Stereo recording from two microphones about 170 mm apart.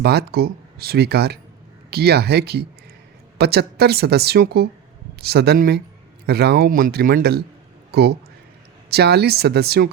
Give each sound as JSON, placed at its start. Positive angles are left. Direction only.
{"t": 0.0, "sound": "a man's voice", "side_deg": -70}